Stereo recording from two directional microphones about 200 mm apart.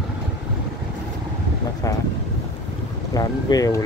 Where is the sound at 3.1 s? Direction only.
20° left (ahead or behind).